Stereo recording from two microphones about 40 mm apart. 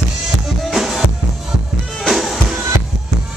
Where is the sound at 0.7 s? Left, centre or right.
Centre.